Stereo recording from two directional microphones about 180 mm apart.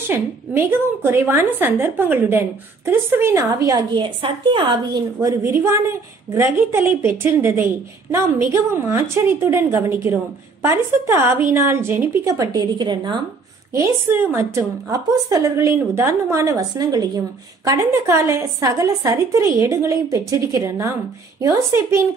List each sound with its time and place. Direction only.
0.1 s a woman's voice: 15° right (ahead or behind)
5.2 s a woman's voice: 15° right (ahead or behind)
13.7 s a woman's voice: 15° right (ahead or behind)